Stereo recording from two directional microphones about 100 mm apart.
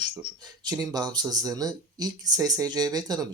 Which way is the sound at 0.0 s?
45° right (ahead or behind).